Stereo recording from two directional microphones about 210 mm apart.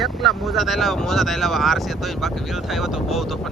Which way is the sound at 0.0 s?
Centre (ahead or behind).